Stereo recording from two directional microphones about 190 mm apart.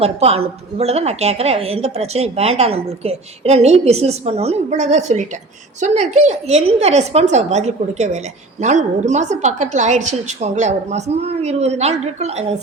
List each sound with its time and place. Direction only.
0.0 s a woman's voice: 30° right (ahead or behind)